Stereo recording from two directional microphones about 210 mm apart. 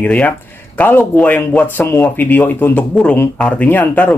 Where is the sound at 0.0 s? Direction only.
5° left (ahead or behind).